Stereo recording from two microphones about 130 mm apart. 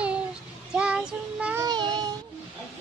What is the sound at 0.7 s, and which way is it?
Child singing, 10° right (ahead or behind).